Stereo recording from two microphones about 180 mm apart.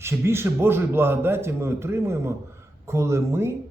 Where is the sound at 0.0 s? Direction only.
15° right (ahead or behind).